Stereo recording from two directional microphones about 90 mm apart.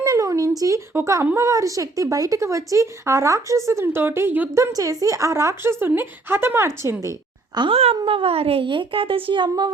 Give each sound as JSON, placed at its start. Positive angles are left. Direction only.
{"t": 0.0, "sound": "a sound", "side_deg": -40}
{"t": 1.0, "sound": "speech", "side_deg": -35}
{"t": 4.5, "sound": "speech", "side_deg": -35}
{"t": 7.7, "sound": "a woman's voice", "side_deg": -90}